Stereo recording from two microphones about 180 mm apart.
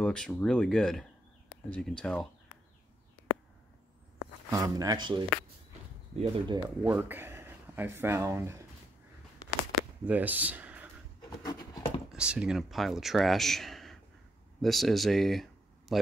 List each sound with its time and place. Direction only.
0.0 s speech: 5° left (ahead or behind)
4.5 s speech: 20° right (ahead or behind)
6.8 s speech: 10° right (ahead or behind)
10.0 s speech: 10° right (ahead or behind)
11.2 s a sound: 20° left (ahead or behind)
12.1 s speech: 5° right (ahead or behind)